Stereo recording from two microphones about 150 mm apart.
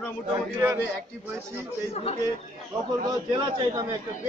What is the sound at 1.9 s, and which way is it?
Speech, 40° left (ahead or behind).